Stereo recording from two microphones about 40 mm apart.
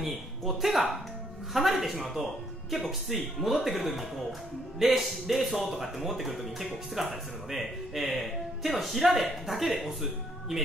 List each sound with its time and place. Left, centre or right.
0.0 s speech: centre